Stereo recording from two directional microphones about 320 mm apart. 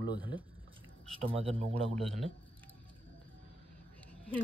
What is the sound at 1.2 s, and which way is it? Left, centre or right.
Speech, centre.